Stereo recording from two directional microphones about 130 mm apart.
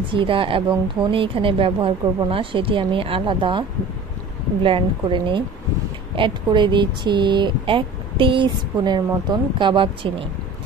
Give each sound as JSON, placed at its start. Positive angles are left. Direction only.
{"t": 0.1, "sound": "speech", "side_deg": -40}
{"t": 4.6, "sound": "speech", "side_deg": -40}